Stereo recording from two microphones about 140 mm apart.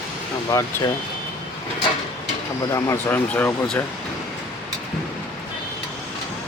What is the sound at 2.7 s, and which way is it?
Speech, 15° left (ahead or behind).